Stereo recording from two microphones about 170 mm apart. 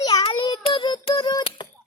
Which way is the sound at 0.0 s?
25° left (ahead or behind).